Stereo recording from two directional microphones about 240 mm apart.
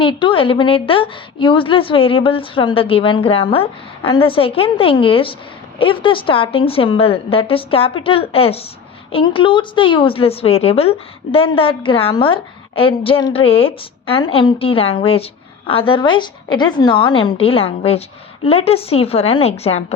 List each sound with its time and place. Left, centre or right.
0.0 s a woman's voice: left